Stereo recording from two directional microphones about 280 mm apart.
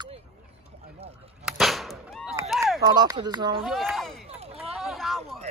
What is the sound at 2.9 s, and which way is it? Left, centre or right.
Speech, centre.